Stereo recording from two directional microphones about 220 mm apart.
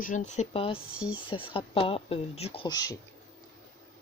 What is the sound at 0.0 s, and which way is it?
Speech, 35° left (ahead or behind).